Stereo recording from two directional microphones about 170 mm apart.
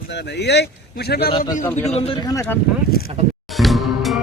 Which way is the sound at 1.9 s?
35° left (ahead or behind).